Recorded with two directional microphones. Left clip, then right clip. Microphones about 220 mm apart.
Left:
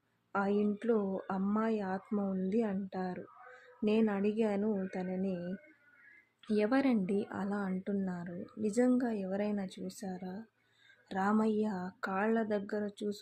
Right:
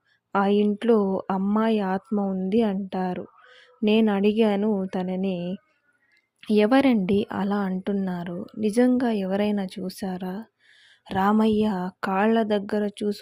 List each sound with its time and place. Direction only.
0.3 s speech: 40° right (ahead or behind)